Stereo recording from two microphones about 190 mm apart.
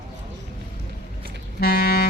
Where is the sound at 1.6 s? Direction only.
55° left (ahead or behind).